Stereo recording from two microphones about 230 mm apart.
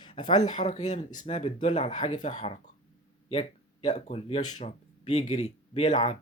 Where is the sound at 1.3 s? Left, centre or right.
Left.